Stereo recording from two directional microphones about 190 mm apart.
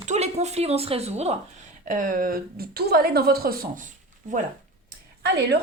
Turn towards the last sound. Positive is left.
turn(degrees=-60)  # may be behind; listen again after turning